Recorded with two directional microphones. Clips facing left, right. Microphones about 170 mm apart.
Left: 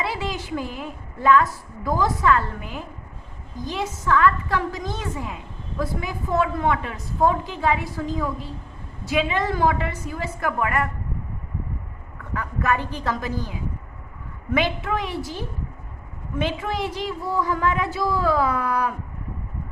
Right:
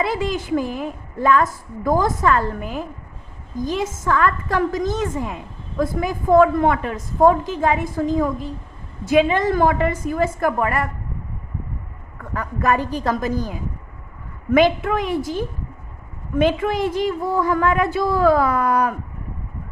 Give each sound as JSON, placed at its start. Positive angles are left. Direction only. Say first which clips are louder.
{"t": 0.0, "sound": "a woman's voice", "louder": "right 6 dB", "side_deg": -45}
{"t": 12.3, "sound": "a woman's voice", "louder": "right 4 dB", "side_deg": -40}
{"t": 14.5, "sound": "a woman's voice", "louder": "right 7 dB", "side_deg": -50}